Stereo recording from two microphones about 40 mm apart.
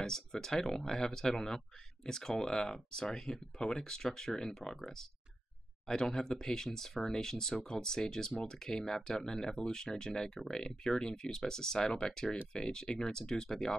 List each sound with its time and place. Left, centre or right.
0.0 s speech: centre
5.9 s speech: centre